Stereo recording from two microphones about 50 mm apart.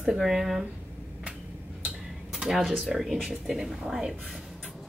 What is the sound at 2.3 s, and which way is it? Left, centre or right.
Speech, centre.